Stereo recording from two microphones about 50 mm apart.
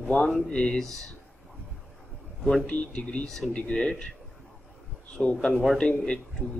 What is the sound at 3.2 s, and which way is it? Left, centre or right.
Speech, centre.